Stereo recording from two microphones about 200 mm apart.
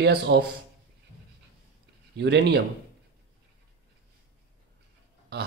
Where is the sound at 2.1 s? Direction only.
60° right (ahead or behind).